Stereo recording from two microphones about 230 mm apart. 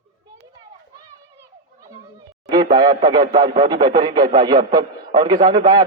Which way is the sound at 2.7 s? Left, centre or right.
Right.